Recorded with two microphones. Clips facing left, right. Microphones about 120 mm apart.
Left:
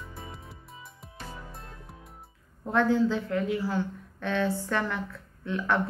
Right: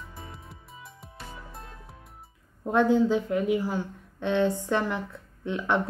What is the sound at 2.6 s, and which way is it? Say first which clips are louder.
A woman's voice: right 2 dB; 15° right (ahead or behind).